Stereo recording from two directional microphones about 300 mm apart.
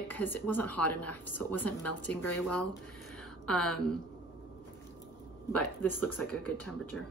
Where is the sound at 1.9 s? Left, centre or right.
Left.